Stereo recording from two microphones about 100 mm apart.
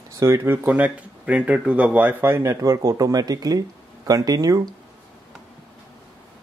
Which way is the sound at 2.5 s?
35° right (ahead or behind).